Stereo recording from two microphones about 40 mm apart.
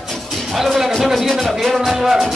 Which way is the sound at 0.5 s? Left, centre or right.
Centre.